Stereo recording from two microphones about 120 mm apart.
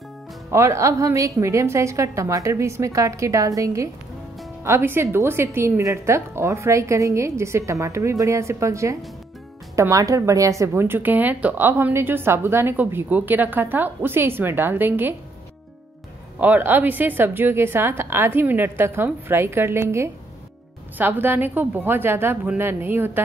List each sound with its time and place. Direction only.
0.5 s a woman's voice: 25° right (ahead or behind)
16.3 s a woman's voice: 15° right (ahead or behind)